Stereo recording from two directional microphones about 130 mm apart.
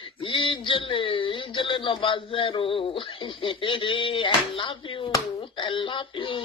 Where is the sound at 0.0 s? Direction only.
40° left (ahead or behind).